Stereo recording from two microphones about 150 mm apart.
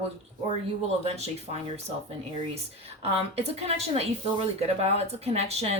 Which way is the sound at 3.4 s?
45° right (ahead or behind).